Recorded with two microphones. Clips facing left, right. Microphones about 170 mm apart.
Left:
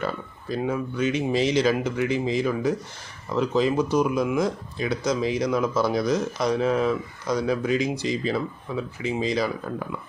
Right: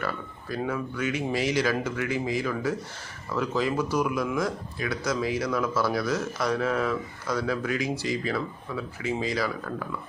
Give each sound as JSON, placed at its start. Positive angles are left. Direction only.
{"t": 0.0, "sound": "speech", "side_deg": 20}